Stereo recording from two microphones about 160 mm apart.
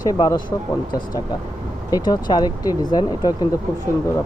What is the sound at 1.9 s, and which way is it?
Speech, 25° left (ahead or behind).